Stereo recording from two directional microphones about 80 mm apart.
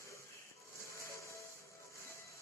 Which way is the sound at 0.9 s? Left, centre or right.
Left.